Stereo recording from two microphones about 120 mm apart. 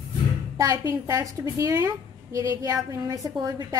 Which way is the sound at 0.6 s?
25° right (ahead or behind).